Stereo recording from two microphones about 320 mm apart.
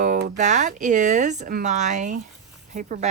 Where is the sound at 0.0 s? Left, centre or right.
Right.